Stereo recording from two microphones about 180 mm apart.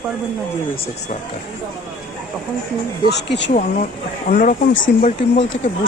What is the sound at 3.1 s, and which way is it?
Speech, 75° left (ahead or behind).